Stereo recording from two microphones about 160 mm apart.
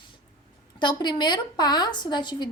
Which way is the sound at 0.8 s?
30° left (ahead or behind).